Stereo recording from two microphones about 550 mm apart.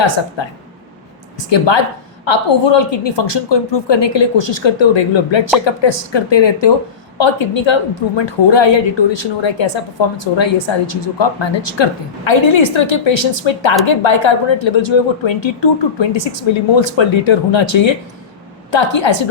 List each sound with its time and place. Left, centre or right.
0.4 s a woman's voice: left